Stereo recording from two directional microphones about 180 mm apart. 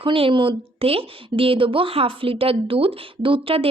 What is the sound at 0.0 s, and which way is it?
A woman's voice, 30° right (ahead or behind).